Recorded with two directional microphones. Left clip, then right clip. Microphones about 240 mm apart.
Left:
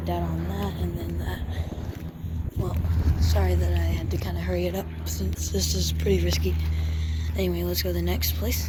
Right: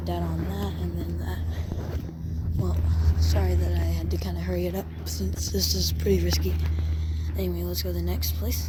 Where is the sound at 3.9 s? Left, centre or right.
Right.